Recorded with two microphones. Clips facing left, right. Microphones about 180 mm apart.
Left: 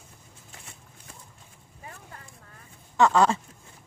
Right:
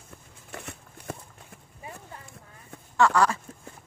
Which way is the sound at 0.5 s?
65° right (ahead or behind).